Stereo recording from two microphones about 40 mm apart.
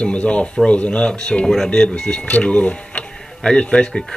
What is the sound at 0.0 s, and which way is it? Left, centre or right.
Speech, left.